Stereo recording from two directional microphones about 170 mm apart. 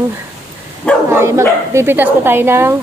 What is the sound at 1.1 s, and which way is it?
Speech, 15° right (ahead or behind).